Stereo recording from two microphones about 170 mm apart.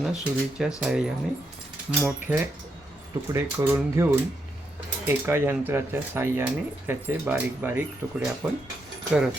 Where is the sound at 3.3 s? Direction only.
15° right (ahead or behind).